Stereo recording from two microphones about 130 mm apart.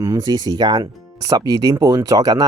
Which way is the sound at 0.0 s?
30° right (ahead or behind).